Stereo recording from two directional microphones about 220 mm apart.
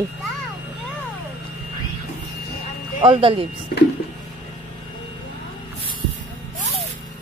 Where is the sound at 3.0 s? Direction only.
25° right (ahead or behind).